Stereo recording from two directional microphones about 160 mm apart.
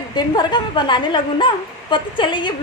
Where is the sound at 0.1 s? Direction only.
25° left (ahead or behind).